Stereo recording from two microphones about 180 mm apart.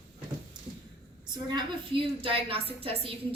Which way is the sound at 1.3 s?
25° right (ahead or behind).